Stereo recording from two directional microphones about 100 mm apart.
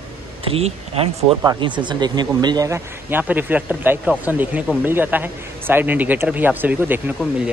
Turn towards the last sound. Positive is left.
turn(degrees=-20)  # may be behind; listen again after turning